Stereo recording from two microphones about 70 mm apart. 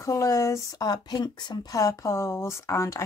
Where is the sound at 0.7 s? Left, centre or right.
Left.